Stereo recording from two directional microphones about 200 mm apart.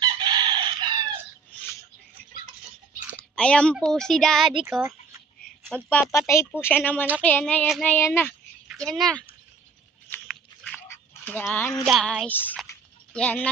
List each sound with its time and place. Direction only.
0.0 s chicken: 20° right (ahead or behind)
3.2 s speech: 5° left (ahead or behind)
5.9 s a child's voice: 10° left (ahead or behind)
10.2 s dog: centre (ahead or behind)
10.8 s speech: 10° left (ahead or behind)